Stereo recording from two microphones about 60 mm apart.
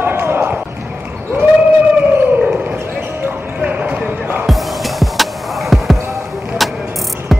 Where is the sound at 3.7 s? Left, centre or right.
Right.